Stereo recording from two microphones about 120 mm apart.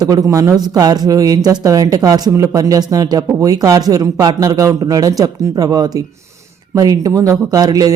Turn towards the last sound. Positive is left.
turn(degrees=-30)  # may be behind; listen again after turning